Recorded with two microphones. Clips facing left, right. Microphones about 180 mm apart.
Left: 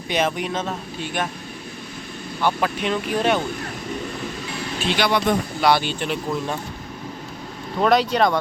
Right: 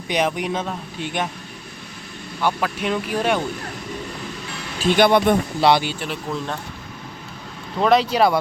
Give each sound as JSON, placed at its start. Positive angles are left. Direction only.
{"t": 0.1, "sound": "speech", "side_deg": -15}
{"t": 2.6, "sound": "speech", "side_deg": -5}
{"t": 4.9, "sound": "speech", "side_deg": -50}
{"t": 5.5, "sound": "speech", "side_deg": -25}
{"t": 5.8, "sound": "speech", "side_deg": -5}
{"t": 7.8, "sound": "speech", "side_deg": 0}